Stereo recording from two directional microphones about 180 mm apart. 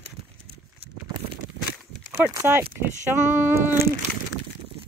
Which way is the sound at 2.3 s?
15° right (ahead or behind).